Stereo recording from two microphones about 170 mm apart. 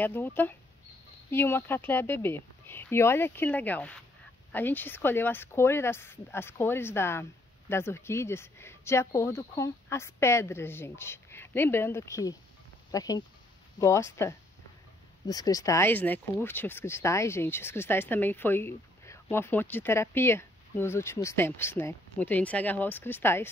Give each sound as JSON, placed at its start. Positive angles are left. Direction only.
{"t": 0.0, "sound": "speech", "side_deg": 10}